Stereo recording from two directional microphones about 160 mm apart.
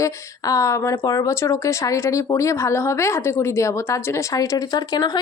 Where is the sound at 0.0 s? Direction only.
20° left (ahead or behind).